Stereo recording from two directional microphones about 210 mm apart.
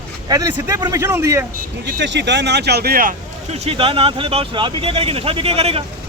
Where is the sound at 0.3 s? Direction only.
15° right (ahead or behind).